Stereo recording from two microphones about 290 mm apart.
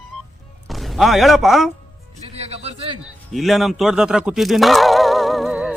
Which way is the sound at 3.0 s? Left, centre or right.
Centre.